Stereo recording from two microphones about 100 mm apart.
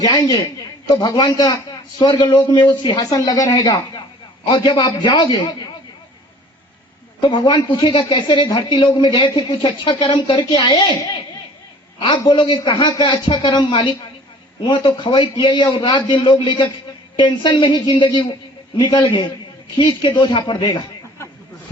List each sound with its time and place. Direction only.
1.0 s speech: 45° left (ahead or behind)
7.2 s a man's voice: 50° left (ahead or behind)